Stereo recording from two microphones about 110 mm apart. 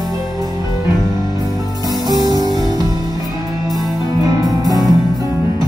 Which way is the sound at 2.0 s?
35° right (ahead or behind).